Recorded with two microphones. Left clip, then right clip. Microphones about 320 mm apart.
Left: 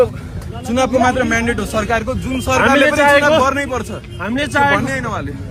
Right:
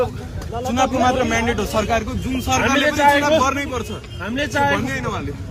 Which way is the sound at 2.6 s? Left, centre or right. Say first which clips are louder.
Left 7 dB; left.